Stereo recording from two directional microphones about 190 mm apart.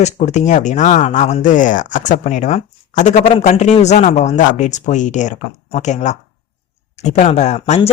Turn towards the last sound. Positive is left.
turn(degrees=30)  # may be behind; listen again after turning